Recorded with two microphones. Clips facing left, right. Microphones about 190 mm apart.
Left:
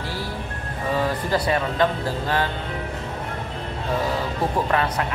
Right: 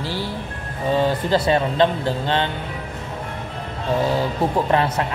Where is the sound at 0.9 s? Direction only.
25° right (ahead or behind).